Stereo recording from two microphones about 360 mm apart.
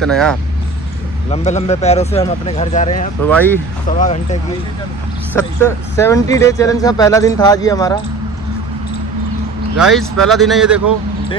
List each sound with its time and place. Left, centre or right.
0.0 s a man's voice: centre
1.3 s speech: centre
3.3 s a man's voice: centre
4.0 s speech: centre
5.3 s speech: centre
9.8 s a man's voice: centre